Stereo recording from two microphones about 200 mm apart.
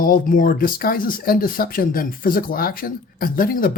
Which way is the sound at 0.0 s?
45° left (ahead or behind).